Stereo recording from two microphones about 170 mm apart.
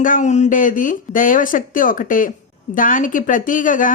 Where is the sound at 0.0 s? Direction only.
50° left (ahead or behind).